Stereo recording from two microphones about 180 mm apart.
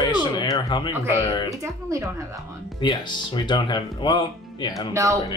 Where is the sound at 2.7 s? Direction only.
25° left (ahead or behind).